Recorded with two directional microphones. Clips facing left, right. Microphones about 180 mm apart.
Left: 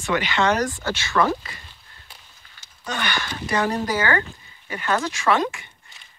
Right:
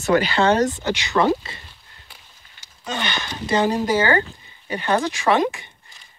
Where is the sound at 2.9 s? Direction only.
20° right (ahead or behind).